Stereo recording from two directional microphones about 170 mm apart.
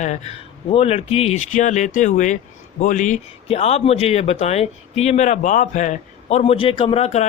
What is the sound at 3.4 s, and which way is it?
Speech, 40° left (ahead or behind).